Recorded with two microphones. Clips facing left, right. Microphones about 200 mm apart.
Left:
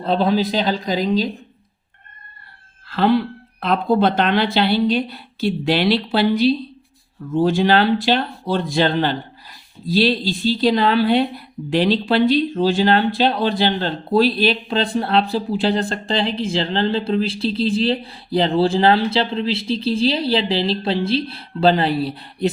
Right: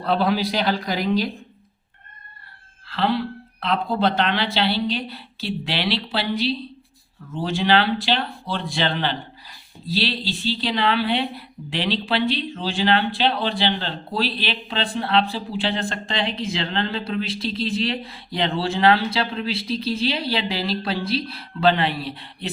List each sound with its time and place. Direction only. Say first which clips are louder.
0.0 s a woman's voice: left 3 dB; 20° left (ahead or behind)
2.9 s a woman's voice: left 6 dB; 50° left (ahead or behind)